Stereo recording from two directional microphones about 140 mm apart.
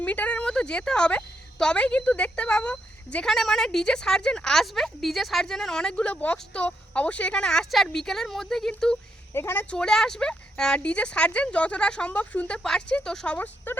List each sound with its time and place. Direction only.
0.0 s a woman's voice: 10° left (ahead or behind)
9.3 s speech: 15° left (ahead or behind)